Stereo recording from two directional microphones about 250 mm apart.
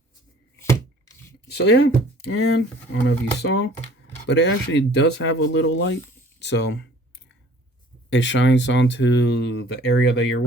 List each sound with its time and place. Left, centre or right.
0.6 s chopping: centre
1.5 s speech: left
8.1 s speech: left